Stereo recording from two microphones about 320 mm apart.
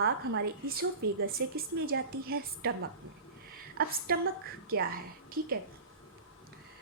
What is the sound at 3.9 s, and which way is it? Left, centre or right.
A woman's voice, right.